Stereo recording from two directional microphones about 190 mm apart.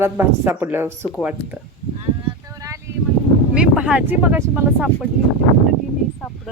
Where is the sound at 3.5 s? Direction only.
5° right (ahead or behind).